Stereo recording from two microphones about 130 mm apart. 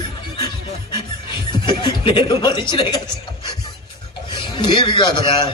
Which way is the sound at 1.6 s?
40° left (ahead or behind).